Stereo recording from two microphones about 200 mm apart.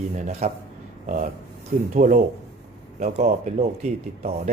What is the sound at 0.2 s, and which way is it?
Speech, 35° right (ahead or behind).